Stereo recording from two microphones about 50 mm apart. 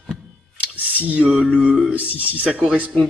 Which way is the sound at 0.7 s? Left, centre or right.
Right.